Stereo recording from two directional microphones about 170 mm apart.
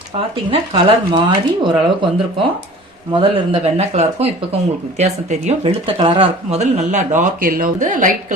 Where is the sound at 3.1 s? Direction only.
30° right (ahead or behind).